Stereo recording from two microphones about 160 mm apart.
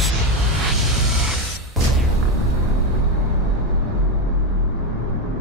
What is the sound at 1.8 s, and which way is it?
Music, centre (ahead or behind).